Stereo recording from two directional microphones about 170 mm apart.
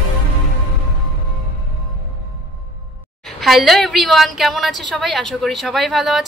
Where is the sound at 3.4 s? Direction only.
Centre (ahead or behind).